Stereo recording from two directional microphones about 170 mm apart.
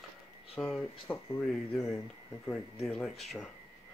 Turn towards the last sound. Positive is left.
turn(degrees=0)  # may be behind; listen again after turning